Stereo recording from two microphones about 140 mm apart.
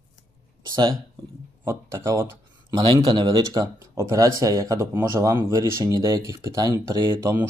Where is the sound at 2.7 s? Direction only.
30° right (ahead or behind).